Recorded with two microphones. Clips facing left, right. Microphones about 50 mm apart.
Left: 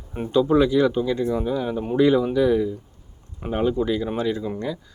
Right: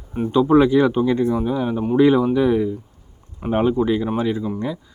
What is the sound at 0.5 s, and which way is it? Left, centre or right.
Speech, right.